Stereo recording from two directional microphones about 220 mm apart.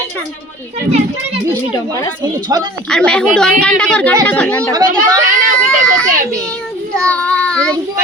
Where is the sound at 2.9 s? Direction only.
5° left (ahead or behind).